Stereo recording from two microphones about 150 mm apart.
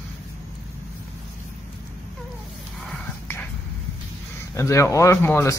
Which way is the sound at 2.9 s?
15° left (ahead or behind).